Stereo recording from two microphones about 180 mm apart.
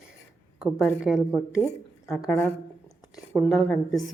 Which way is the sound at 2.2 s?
10° left (ahead or behind).